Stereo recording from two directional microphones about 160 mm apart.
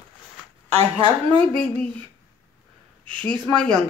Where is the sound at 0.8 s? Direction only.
35° right (ahead or behind).